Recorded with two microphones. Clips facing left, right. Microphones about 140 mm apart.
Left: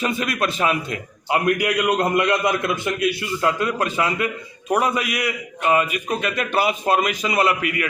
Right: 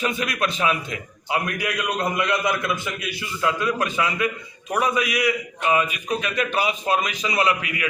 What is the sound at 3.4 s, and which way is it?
Speech, 35° left (ahead or behind).